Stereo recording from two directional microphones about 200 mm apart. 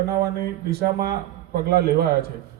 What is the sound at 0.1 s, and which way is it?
A man's voice, 50° right (ahead or behind).